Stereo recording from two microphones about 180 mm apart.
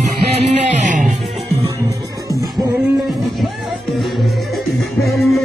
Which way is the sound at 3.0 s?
Centre (ahead or behind).